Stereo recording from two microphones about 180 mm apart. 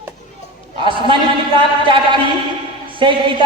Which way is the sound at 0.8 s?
25° right (ahead or behind).